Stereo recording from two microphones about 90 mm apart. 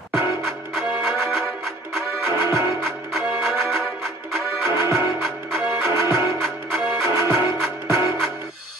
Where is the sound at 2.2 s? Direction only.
30° right (ahead or behind).